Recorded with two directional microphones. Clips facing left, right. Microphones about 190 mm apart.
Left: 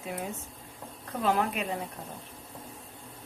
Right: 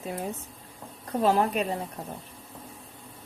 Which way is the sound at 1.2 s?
35° right (ahead or behind).